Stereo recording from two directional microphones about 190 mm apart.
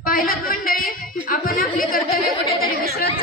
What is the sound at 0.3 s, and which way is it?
Speech, 50° left (ahead or behind).